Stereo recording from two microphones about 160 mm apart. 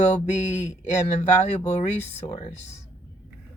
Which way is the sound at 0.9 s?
45° left (ahead or behind).